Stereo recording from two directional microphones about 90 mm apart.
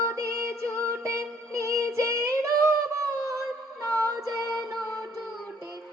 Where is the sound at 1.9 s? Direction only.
30° right (ahead or behind).